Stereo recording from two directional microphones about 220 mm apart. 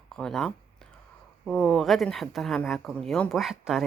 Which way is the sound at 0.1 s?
Centre (ahead or behind).